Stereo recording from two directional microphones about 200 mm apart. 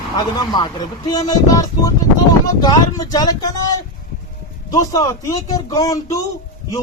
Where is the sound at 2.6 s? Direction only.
20° left (ahead or behind).